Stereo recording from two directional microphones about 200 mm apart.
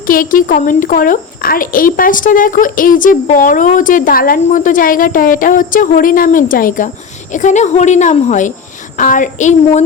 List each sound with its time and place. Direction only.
0.1 s speech: 45° left (ahead or behind)